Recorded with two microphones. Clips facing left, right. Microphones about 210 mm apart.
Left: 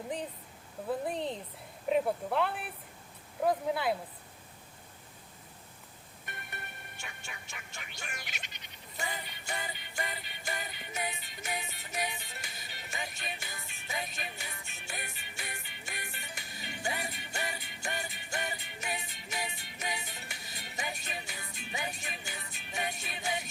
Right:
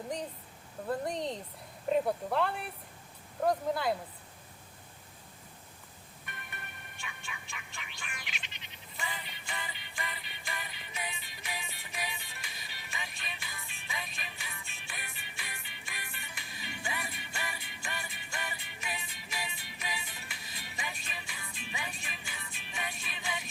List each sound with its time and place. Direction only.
0.9 s speech: 5° left (ahead or behind)
6.2 s music: 40° left (ahead or behind)